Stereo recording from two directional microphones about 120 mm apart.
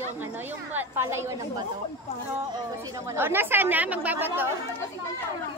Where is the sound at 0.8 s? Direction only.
20° right (ahead or behind).